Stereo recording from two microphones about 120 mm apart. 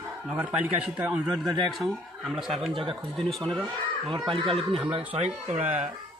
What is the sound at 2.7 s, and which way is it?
Speech, 45° right (ahead or behind).